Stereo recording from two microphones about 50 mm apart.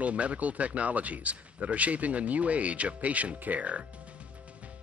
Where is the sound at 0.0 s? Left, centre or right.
Right.